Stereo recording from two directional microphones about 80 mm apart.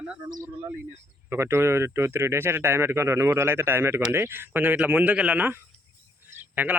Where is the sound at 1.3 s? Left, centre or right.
Right.